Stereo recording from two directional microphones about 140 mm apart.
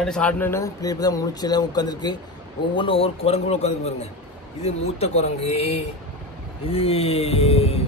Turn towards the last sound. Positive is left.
turn(degrees=50)  # may be behind; listen again after turning